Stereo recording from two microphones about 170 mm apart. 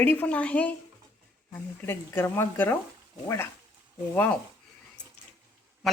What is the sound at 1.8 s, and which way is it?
Speech, 15° left (ahead or behind).